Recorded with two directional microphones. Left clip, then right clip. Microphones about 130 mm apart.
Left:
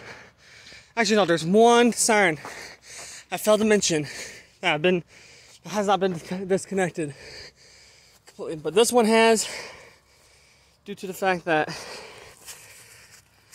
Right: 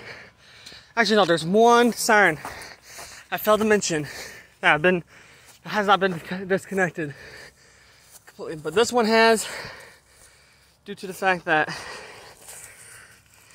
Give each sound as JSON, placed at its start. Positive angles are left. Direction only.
{"t": 0.0, "sound": "a sound", "side_deg": 35}
{"t": 0.9, "sound": "speech", "side_deg": 30}
{"t": 2.6, "sound": "a sound", "side_deg": 55}
{"t": 4.6, "sound": "speech", "side_deg": 25}
{"t": 4.9, "sound": "speech", "side_deg": 50}
{"t": 5.6, "sound": "speech", "side_deg": 35}
{"t": 6.2, "sound": "speech", "side_deg": 45}
{"t": 8.3, "sound": "speech", "side_deg": 35}
{"t": 10.9, "sound": "speech", "side_deg": 30}